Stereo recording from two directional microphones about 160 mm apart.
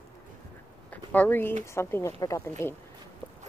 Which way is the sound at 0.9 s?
10° left (ahead or behind).